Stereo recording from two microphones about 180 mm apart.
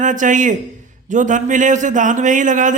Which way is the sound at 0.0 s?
45° right (ahead or behind).